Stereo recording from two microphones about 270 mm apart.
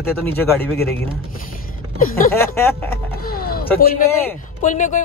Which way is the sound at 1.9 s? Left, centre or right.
Left.